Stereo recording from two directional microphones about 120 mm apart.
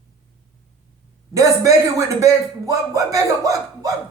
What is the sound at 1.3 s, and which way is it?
A man's voice, 30° right (ahead or behind).